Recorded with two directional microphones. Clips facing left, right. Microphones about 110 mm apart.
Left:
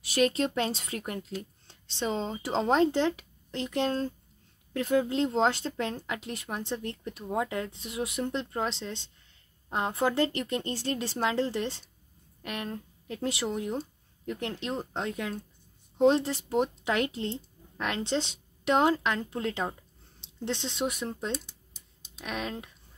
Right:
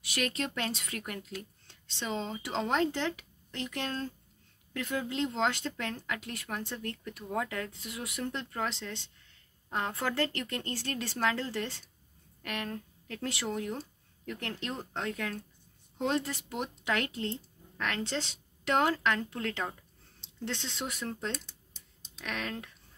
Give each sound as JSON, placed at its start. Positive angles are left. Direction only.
{"t": 0.0, "sound": "speech", "side_deg": 30}